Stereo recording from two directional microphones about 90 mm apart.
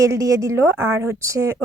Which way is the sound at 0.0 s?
40° right (ahead or behind).